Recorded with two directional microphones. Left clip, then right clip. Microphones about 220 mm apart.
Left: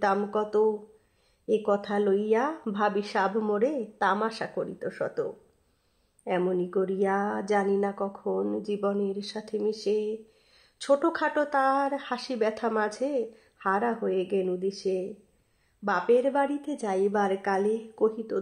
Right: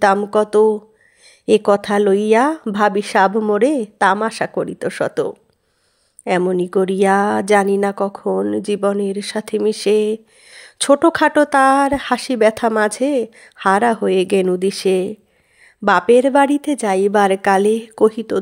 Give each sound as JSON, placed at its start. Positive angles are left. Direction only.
{"t": 0.0, "sound": "speech", "side_deg": -35}